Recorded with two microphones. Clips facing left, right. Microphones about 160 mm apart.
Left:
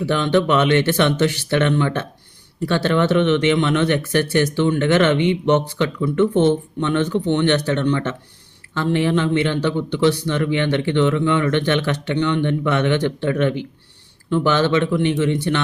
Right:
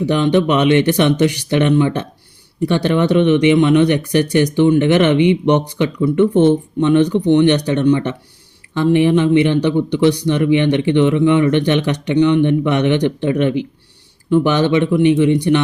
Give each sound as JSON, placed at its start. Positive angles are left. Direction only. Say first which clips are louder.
{"t": 0.0, "sound": "speech", "louder": "right 3 dB", "side_deg": -15}